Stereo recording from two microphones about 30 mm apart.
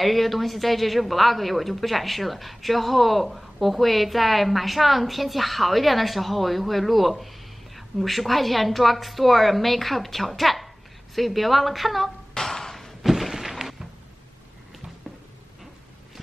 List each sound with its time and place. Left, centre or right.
0.0 s speech: centre
12.4 s a sound: centre
13.0 s thunk: centre